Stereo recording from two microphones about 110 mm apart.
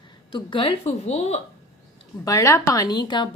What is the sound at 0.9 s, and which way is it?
Speech, 80° left.